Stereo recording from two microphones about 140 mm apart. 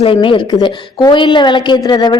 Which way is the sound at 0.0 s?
40° left (ahead or behind).